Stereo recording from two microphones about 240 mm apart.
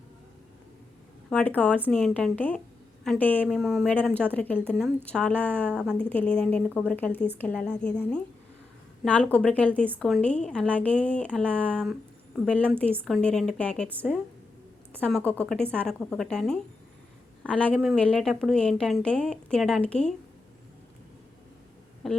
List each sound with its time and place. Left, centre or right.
1.3 s a woman's voice: centre
22.0 s a woman's voice: centre